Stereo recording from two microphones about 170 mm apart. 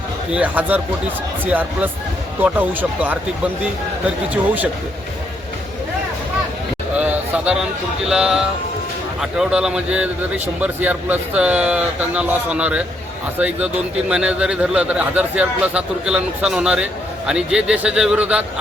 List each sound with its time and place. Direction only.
0.3 s a man's voice: 10° right (ahead or behind)
6.9 s a man's voice: 10° right (ahead or behind)
14.1 s a man's voice: 5° right (ahead or behind)